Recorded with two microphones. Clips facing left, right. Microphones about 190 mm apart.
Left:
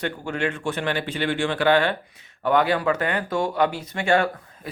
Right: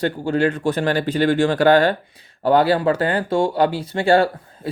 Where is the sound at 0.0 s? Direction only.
35° right (ahead or behind).